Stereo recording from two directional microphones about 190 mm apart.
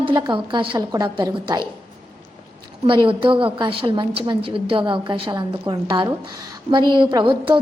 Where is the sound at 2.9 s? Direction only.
25° right (ahead or behind).